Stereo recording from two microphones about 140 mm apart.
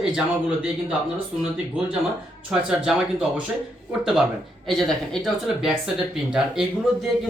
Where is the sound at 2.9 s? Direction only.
5° right (ahead or behind).